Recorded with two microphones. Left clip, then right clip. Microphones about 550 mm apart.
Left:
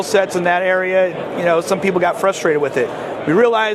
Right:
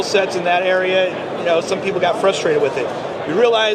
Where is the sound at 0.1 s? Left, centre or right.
Left.